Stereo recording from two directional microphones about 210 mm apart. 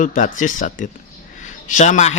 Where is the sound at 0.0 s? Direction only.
40° left (ahead or behind).